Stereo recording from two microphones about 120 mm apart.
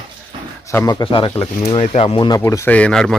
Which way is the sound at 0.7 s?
20° left (ahead or behind).